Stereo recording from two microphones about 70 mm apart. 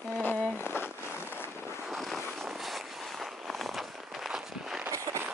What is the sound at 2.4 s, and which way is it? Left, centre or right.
Walk, centre.